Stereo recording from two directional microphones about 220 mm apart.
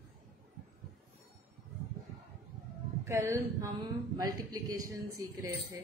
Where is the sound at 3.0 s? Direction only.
15° right (ahead or behind).